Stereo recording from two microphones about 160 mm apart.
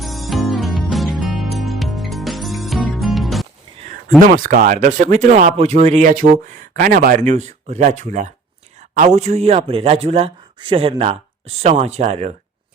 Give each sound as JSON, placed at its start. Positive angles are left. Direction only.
{"t": 0.0, "sound": "music", "side_deg": 0}
{"t": 3.8, "sound": "a sound", "side_deg": -55}
{"t": 4.2, "sound": "speech", "side_deg": -60}